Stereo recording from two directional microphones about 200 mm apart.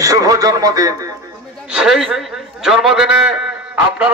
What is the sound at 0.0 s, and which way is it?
Radio, 15° right (ahead or behind).